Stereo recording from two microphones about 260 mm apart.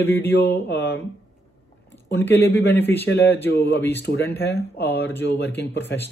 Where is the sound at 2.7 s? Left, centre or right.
Centre.